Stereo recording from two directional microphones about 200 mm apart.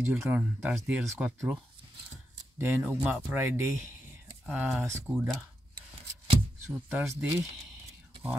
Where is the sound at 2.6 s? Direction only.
10° right (ahead or behind).